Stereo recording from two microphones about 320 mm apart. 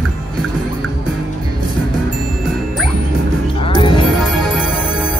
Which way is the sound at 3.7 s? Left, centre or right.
Centre.